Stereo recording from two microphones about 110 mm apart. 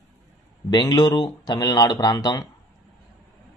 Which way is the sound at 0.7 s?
40° left (ahead or behind).